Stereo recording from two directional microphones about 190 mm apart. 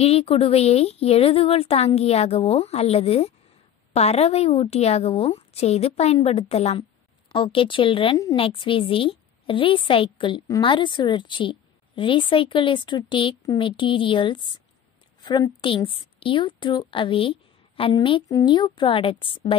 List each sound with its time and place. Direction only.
0.0 s a woman's voice: 30° left (ahead or behind)